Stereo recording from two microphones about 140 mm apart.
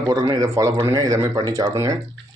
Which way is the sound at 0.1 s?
25° right (ahead or behind).